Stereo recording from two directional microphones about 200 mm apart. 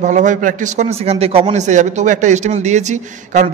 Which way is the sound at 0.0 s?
40° right (ahead or behind).